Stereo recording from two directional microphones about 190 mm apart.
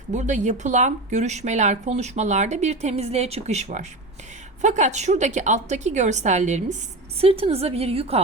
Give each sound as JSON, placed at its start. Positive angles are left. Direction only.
{"t": 0.1, "sound": "speech", "side_deg": -40}